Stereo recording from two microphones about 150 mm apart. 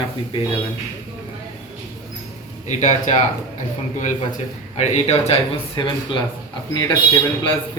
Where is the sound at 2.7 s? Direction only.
50° left (ahead or behind).